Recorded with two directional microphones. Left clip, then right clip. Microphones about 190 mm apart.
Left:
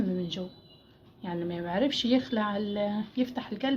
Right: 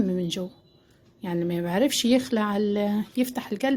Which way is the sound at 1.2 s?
60° right (ahead or behind).